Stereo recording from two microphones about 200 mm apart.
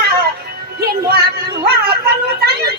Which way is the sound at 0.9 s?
50° right (ahead or behind).